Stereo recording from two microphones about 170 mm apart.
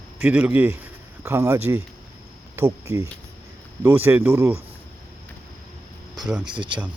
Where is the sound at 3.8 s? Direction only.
15° right (ahead or behind).